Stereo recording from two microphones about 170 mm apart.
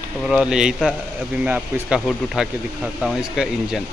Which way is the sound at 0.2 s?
5° right (ahead or behind).